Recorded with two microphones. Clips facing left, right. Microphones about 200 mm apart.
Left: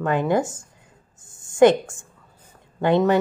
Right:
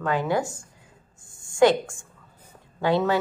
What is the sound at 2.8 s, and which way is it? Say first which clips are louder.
Speech: left 4 dB; 20° left (ahead or behind).